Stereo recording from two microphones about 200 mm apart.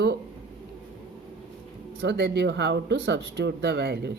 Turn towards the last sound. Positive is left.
turn(degrees=-55)  # may be behind; listen again after turning